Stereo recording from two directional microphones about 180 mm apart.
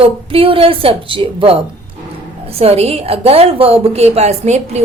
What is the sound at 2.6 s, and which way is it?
A woman's voice, 35° right (ahead or behind).